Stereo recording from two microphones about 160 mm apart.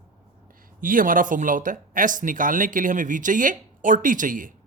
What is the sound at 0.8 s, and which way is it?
Speech, 60° right (ahead or behind).